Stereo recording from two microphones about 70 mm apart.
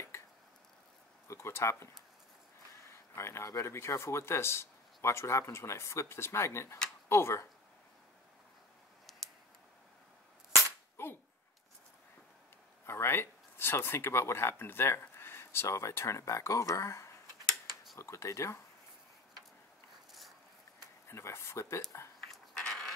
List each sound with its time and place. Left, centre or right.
1.2 s speech: left
3.2 s speech: left
12.8 s speech: left
20.1 s a sound: centre
21.1 s speech: left
22.3 s a sound: centre